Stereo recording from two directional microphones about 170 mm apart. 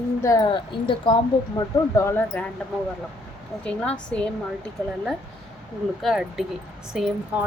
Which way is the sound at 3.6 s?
5° left (ahead or behind).